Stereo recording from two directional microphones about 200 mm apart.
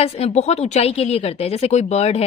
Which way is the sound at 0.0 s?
30° left (ahead or behind).